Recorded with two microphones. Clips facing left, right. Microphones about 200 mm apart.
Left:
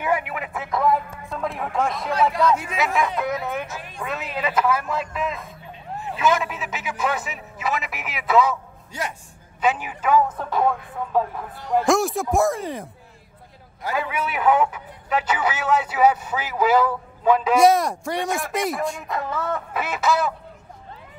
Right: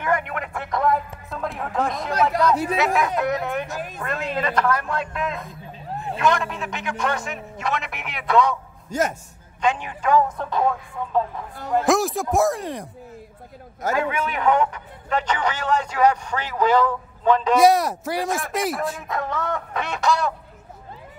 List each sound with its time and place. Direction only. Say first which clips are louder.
0.0 s a sound: even; 5° left (ahead or behind)
2.4 s speech: right 1 dB; 35° right (ahead or behind)
2.8 s a man's voice: right 2 dB; centre (ahead or behind)
5.1 s a sound: even; centre (ahead or behind)
6.1 s a man's voice: even; 5° left (ahead or behind)
8.9 s a man's voice: right 7 dB; 45° right (ahead or behind)
9.6 s a man's voice: even; 5° left (ahead or behind)
11.8 s a man's voice: even; centre (ahead or behind)
13.9 s a man's voice: even; 5° left (ahead or behind)